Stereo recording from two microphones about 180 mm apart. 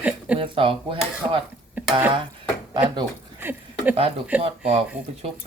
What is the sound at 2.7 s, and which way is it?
Speech, 25° right (ahead or behind).